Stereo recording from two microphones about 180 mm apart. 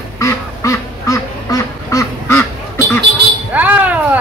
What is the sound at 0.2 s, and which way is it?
Duck, 15° left (ahead or behind).